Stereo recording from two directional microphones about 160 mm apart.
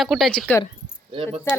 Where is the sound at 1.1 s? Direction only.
35° right (ahead or behind).